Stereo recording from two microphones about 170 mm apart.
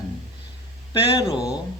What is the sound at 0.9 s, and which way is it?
Speech, 30° left (ahead or behind).